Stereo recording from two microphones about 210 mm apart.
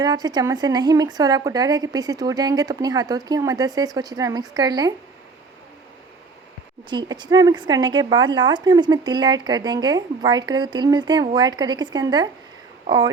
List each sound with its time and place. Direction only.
0.0 s speech: 20° right (ahead or behind)
6.9 s speech: 20° right (ahead or behind)